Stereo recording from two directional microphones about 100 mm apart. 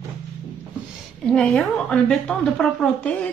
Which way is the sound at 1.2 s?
5° left (ahead or behind).